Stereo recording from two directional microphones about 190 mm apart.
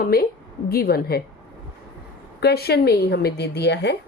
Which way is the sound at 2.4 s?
60° left (ahead or behind).